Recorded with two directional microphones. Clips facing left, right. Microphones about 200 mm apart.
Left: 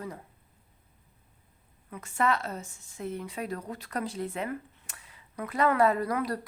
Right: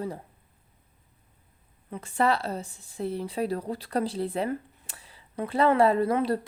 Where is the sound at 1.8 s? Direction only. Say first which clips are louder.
Right 3 dB; 30° right (ahead or behind).